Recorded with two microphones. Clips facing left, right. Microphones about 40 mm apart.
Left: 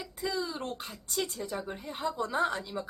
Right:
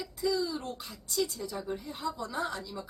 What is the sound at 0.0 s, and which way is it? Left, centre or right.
Speech, left.